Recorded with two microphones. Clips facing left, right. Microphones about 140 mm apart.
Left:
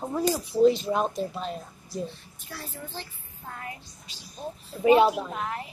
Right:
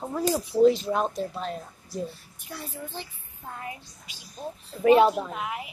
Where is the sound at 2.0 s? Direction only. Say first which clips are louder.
Right 1 dB; 10° right (ahead or behind).